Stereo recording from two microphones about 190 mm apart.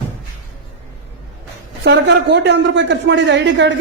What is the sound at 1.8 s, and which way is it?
A man's voice, 65° right (ahead or behind).